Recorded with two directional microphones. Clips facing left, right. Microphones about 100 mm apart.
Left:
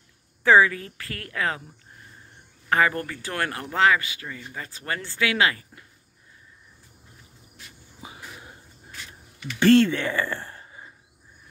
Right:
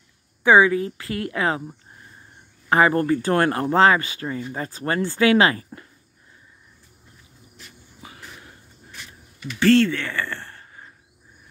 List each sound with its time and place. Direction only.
0.4 s speech: 20° right (ahead or behind)
2.7 s speech: 30° right (ahead or behind)
8.0 s a sound: 20° left (ahead or behind)
9.6 s speech: 20° left (ahead or behind)